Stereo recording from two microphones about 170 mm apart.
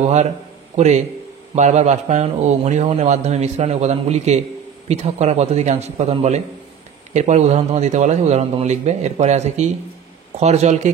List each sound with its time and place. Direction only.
0.7 s speech: 40° right (ahead or behind)